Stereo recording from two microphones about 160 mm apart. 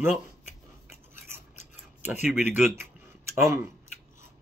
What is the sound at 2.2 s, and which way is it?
Speech, 5° right (ahead or behind).